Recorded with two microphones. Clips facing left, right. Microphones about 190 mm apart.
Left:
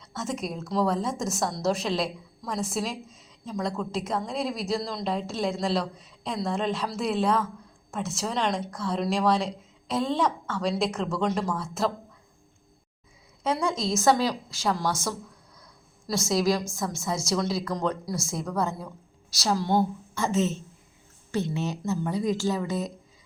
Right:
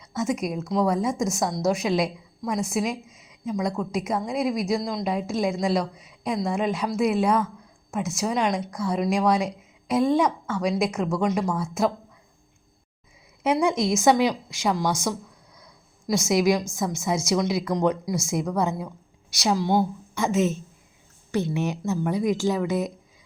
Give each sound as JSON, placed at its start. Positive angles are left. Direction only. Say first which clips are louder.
{"t": 0.0, "sound": "a woman's voice", "louder": "right 6 dB", "side_deg": -15}
{"t": 13.4, "sound": "speech", "louder": "right 5 dB", "side_deg": -20}
{"t": 15.5, "sound": "a sound", "louder": "right 2 dB", "side_deg": -20}
{"t": 16.7, "sound": "speech", "louder": "right 4 dB", "side_deg": -20}